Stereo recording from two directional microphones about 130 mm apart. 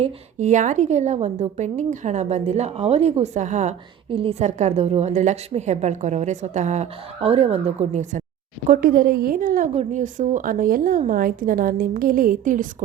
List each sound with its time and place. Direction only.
0.0 s a woman's voice: 65° right (ahead or behind)
4.1 s a woman's voice: 45° right (ahead or behind); by 6.8 s 65° right (ahead or behind)
7.2 s speech: 50° right (ahead or behind)
8.6 s a woman's voice: 85° right
9.7 s a woman's voice: 75° right (ahead or behind); by 12.6 s 90° right